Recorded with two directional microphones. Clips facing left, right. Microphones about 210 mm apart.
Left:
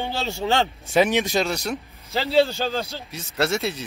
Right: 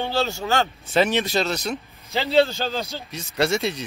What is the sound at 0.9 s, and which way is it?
Speech, 15° left (ahead or behind).